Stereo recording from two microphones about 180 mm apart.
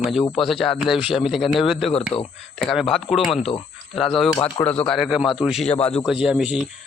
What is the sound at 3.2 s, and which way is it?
Speech, 30° left (ahead or behind).